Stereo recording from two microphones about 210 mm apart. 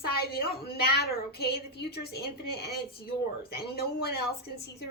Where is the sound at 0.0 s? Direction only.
45° left (ahead or behind).